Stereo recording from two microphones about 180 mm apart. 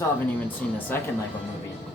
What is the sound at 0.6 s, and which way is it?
Speech, 5° left (ahead or behind).